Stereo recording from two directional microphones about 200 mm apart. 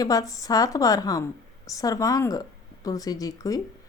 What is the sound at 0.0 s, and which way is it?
A woman's voice, 15° left (ahead or behind).